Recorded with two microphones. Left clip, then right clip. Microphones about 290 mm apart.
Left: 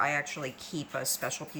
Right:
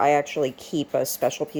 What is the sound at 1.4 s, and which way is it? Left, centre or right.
Speech, right.